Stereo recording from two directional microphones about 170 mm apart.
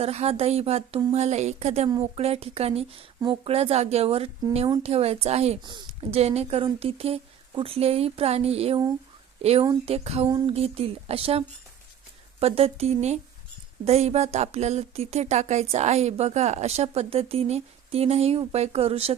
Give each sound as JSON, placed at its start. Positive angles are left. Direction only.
{"t": 0.0, "sound": "speech", "side_deg": -40}
{"t": 10.2, "sound": "a sound", "side_deg": -25}
{"t": 10.5, "sound": "speech", "side_deg": -35}